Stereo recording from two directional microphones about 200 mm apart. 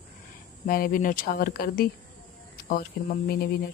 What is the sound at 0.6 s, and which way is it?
Speech, 45° left (ahead or behind).